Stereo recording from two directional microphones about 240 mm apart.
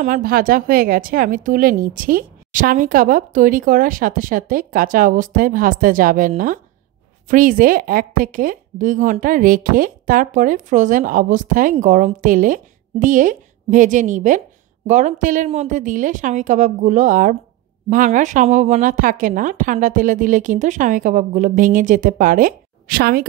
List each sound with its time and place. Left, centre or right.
0.0 s a woman's voice: right